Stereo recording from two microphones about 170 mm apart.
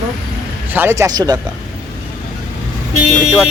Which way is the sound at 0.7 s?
15° right (ahead or behind).